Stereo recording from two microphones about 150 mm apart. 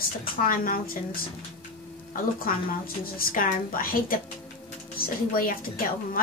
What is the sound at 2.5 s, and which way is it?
A woman's voice, 70° left (ahead or behind).